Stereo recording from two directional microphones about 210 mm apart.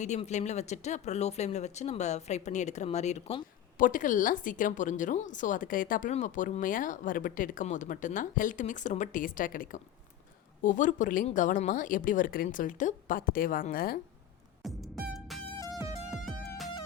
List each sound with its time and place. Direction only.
0.0 s speech: 35° left (ahead or behind)
14.6 s music: centre (ahead or behind)